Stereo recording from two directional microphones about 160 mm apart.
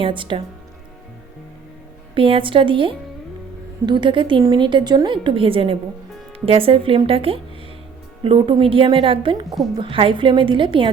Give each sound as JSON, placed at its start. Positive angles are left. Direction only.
{"t": 0.0, "sound": "a woman's voice", "side_deg": -30}
{"t": 2.1, "sound": "a woman's voice", "side_deg": -35}